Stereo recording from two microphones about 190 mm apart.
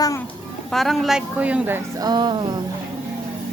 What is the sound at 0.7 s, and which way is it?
A woman's voice, centre (ahead or behind).